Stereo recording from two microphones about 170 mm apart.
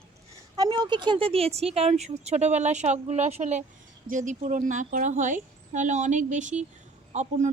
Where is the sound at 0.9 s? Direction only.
25° right (ahead or behind).